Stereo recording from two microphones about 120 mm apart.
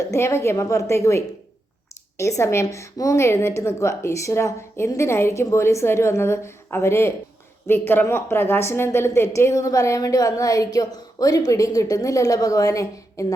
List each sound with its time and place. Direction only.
0.0 s a woman's voice: 25° left (ahead or behind)